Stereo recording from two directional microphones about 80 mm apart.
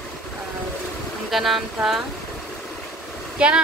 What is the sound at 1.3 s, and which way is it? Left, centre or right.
Speech, centre.